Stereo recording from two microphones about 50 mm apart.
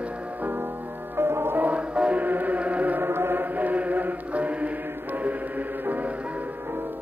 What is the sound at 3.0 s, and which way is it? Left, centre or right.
Mantra, right.